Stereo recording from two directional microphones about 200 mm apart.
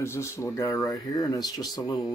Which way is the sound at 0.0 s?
15° left (ahead or behind).